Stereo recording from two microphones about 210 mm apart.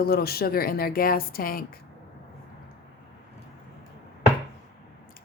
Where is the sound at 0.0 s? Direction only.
45° left (ahead or behind).